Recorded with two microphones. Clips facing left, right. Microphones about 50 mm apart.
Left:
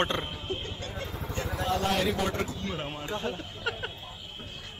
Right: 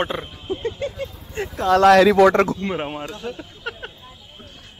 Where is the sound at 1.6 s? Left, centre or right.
Right.